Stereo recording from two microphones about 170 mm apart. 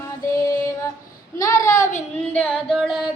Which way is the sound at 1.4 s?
20° left (ahead or behind).